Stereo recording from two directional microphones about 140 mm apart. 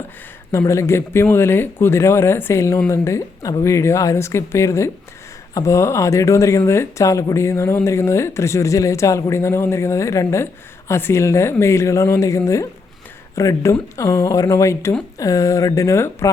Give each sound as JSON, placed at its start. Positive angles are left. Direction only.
{"t": 0.5, "sound": "speech", "side_deg": 20}